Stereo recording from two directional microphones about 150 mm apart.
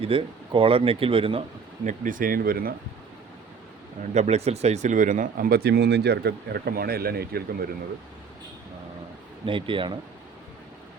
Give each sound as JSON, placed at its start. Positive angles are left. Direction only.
{"t": 0.0, "sound": "speech", "side_deg": -40}
{"t": 1.8, "sound": "speech", "side_deg": -60}
{"t": 4.1, "sound": "speech", "side_deg": -45}
{"t": 9.5, "sound": "speech", "side_deg": -35}